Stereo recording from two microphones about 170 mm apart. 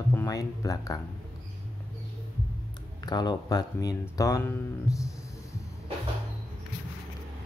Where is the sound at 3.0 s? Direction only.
25° left (ahead or behind).